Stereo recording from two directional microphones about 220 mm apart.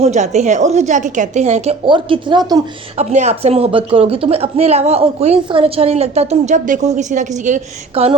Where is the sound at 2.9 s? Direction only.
30° right (ahead or behind).